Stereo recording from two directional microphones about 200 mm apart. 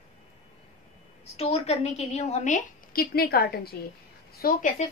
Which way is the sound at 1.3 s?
30° left (ahead or behind).